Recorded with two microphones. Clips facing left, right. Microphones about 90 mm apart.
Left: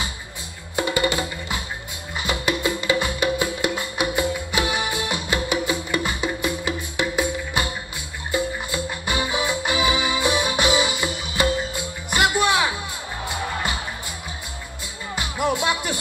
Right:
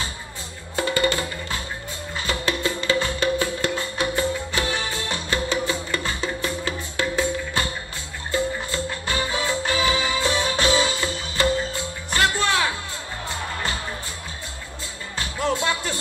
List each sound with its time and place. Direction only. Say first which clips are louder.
0.7 s music: even; 15° left (ahead or behind)
15.1 s music: left 1 dB; 15° left (ahead or behind)